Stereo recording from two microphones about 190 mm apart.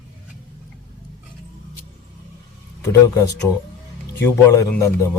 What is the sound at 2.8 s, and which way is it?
Speech, 15° left (ahead or behind).